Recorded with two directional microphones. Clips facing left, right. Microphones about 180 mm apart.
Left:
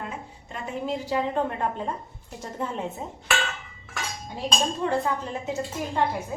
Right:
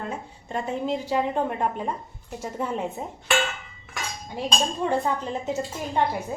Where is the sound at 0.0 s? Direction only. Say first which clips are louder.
Right 3 dB; 30° right (ahead or behind).